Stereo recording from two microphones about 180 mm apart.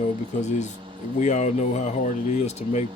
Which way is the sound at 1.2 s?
40° left (ahead or behind).